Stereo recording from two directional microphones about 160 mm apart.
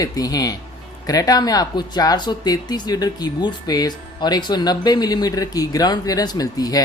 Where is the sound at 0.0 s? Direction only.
25° left (ahead or behind).